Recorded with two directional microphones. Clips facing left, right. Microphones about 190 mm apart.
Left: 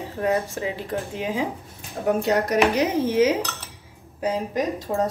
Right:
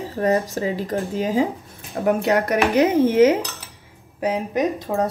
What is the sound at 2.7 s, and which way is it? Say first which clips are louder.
Speech: right 5 dB; 55° right (ahead or behind).